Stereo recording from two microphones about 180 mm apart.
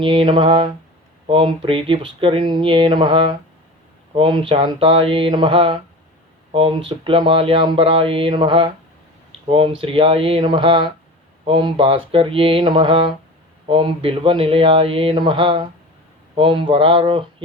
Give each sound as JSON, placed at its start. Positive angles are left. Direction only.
{"t": 0.0, "sound": "speech", "side_deg": -30}
{"t": 9.8, "sound": "speech", "side_deg": -30}